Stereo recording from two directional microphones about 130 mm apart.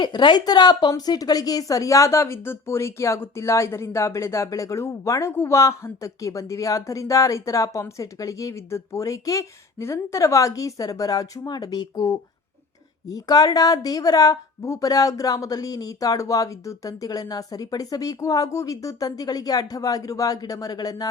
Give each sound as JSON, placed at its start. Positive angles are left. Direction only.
{"t": 0.0, "sound": "a woman's voice", "side_deg": 35}